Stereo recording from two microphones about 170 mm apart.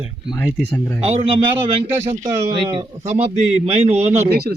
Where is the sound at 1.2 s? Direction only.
30° right (ahead or behind).